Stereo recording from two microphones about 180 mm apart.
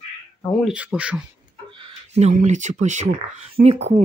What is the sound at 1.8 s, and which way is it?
Speech, 35° right (ahead or behind).